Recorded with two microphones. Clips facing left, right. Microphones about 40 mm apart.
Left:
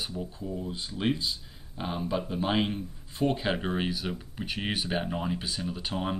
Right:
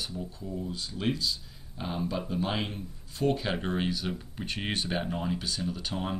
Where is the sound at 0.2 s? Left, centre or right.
Centre.